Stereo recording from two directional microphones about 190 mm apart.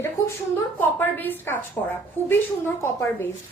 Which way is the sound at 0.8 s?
10° left (ahead or behind).